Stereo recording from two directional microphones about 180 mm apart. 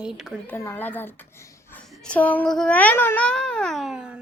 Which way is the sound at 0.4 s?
10° left (ahead or behind).